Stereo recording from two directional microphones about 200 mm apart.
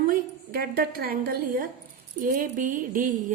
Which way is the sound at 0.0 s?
45° right (ahead or behind).